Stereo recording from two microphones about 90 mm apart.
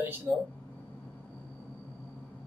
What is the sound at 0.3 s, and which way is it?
Speech, 20° right (ahead or behind).